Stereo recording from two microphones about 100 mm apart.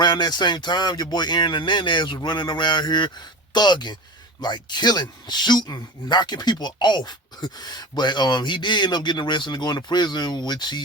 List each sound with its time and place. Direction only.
0.0 s speech: 45° left (ahead or behind)